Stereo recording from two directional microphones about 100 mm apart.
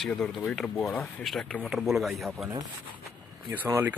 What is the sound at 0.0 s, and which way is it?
Speech, 5° left (ahead or behind).